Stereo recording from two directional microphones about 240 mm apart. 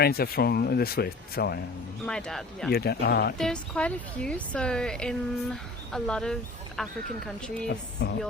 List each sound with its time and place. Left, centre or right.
0.0 s speech: left
2.0 s a woman's voice: centre
2.6 s speech: left
3.3 s a woman's voice: centre
8.0 s speech: left